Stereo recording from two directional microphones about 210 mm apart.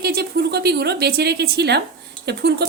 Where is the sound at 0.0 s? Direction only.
50° right (ahead or behind).